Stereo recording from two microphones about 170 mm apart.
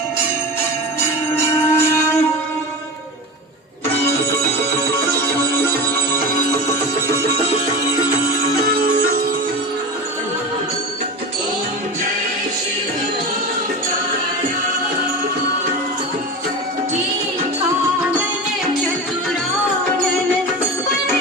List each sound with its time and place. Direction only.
1.7 s music: 15° left (ahead or behind)